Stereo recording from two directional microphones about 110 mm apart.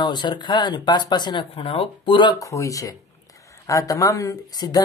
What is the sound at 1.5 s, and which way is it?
Speech, 60° left (ahead or behind).